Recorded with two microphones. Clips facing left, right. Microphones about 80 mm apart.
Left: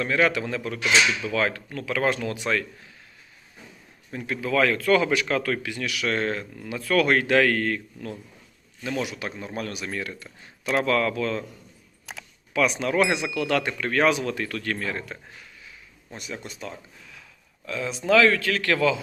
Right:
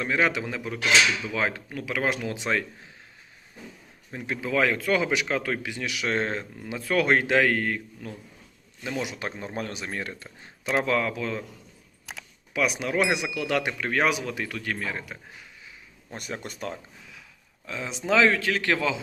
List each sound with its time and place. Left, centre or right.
0.0 s speech: centre
4.1 s speech: centre
9.1 s speech: right; by 11.4 s centre
12.1 s camera: centre
12.5 s speech: centre
16.1 s speech: right
17.7 s speech: centre